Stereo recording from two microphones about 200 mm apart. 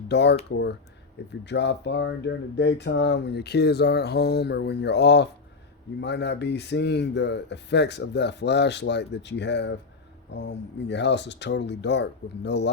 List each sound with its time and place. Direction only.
0.1 s speech: 60° left (ahead or behind)